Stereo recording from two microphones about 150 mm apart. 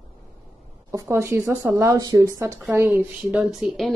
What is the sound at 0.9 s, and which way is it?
A woman's voice, 20° right (ahead or behind).